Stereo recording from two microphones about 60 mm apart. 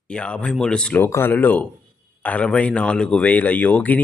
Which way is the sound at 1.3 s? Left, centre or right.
Left.